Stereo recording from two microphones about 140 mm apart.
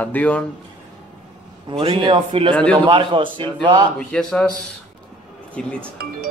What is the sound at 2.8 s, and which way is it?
A man's voice, 35° right (ahead or behind).